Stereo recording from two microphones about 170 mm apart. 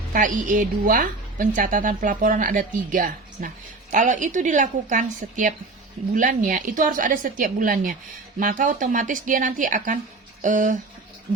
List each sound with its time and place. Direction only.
0.1 s a woman's voice: 50° right (ahead or behind)